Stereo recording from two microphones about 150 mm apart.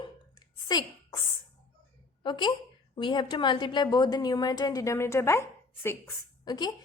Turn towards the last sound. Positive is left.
turn(degrees=25)  # may be behind; listen again after turning